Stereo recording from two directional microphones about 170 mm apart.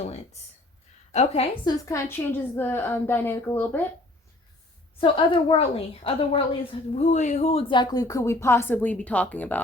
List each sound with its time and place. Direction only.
1.1 s a woman's voice: 40° left (ahead or behind)
1.6 s a woman's voice: 20° left (ahead or behind)
4.9 s a woman's voice: 30° left (ahead or behind); by 9.6 s 10° left (ahead or behind)